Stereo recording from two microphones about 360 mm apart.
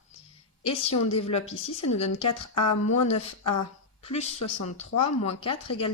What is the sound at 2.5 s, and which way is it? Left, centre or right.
Speech, left.